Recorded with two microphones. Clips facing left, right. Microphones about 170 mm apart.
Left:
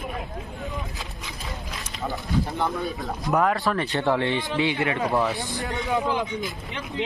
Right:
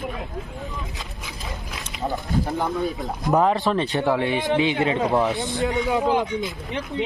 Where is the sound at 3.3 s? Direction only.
20° right (ahead or behind).